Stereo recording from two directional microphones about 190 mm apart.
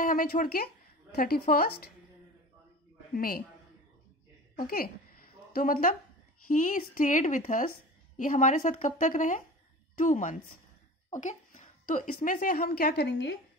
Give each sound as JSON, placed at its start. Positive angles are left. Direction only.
{"t": 0.0, "sound": "speech", "side_deg": 45}
{"t": 3.2, "sound": "speech", "side_deg": 50}
{"t": 4.6, "sound": "a woman's voice", "side_deg": 50}